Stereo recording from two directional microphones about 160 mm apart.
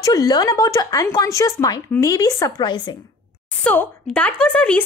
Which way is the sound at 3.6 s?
10° left (ahead or behind).